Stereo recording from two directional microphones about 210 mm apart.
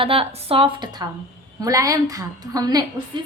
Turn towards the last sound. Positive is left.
turn(degrees=-20)  # may be behind; listen again after turning